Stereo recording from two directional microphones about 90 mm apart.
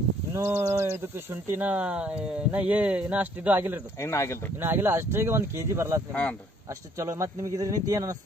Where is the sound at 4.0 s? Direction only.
35° left (ahead or behind).